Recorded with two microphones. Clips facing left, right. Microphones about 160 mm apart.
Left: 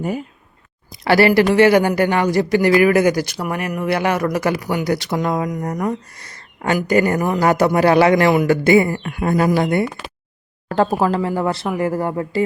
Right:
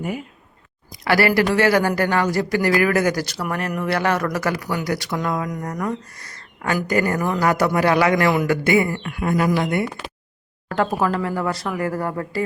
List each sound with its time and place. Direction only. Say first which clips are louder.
1.0 s a man's voice: left 4 dB; 25° left (ahead or behind)